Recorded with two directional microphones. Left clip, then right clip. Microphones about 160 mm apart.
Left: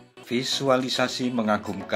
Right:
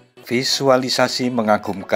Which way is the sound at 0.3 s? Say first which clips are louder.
Right 7 dB; 45° right (ahead or behind).